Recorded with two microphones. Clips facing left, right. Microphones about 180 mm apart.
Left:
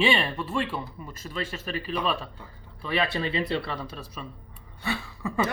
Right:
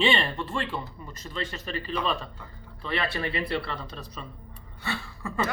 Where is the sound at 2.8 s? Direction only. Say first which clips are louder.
Left 3 dB; 20° left (ahead or behind).